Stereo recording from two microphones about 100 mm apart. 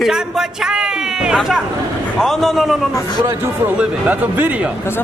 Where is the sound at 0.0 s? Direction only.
5° right (ahead or behind).